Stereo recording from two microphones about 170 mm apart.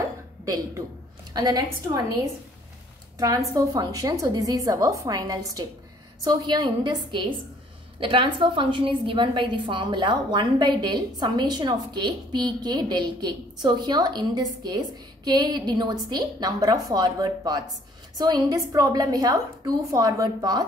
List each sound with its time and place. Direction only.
1.3 s a woman's voice: 25° right (ahead or behind)
3.2 s a woman's voice: 20° right (ahead or behind)